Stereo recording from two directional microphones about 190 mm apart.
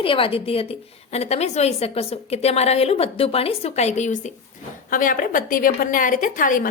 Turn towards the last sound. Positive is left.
turn(degrees=45)  # may be behind; listen again after turning